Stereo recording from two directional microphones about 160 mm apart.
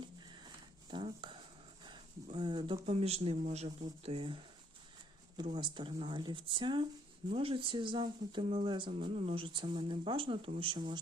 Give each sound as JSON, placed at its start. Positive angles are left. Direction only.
{"t": 0.2, "sound": "a sound", "side_deg": -25}
{"t": 2.2, "sound": "speech", "side_deg": -30}
{"t": 5.5, "sound": "speech", "side_deg": -30}